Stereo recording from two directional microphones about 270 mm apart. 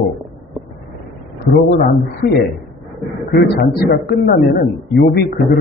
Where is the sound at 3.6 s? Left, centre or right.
Left.